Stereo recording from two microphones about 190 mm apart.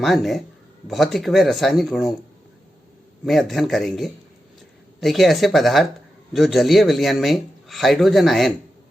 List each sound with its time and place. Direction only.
0.0 s a man's voice: centre (ahead or behind)
3.2 s a man's voice: centre (ahead or behind)